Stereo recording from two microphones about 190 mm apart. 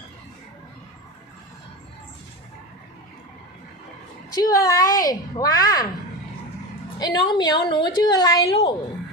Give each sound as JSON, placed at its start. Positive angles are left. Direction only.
{"t": 4.4, "sound": "a woman's voice", "side_deg": 20}
{"t": 7.0, "sound": "a woman's voice", "side_deg": 25}